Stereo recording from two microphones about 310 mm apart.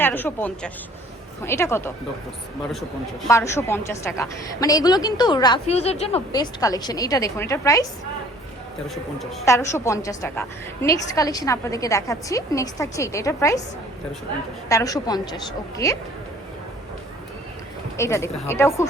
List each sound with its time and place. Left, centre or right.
0.0 s a woman's voice: centre
3.2 s a woman's voice: centre
9.1 s a woman's voice: centre
14.7 s a woman's voice: centre
17.9 s a woman's voice: centre